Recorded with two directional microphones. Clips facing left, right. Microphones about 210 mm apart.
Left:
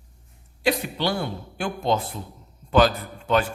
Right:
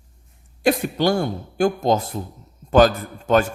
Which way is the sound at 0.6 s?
45° right (ahead or behind).